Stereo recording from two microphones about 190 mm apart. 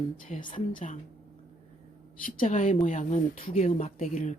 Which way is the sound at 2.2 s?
40° left (ahead or behind).